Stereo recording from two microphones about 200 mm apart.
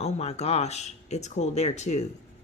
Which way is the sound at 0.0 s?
30° left (ahead or behind).